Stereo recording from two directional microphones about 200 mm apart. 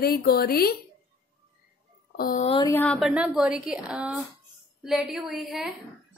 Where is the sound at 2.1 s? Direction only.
45° left (ahead or behind).